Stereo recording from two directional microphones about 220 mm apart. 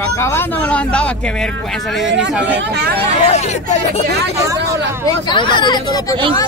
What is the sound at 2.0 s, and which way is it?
Speech, 55° right (ahead or behind).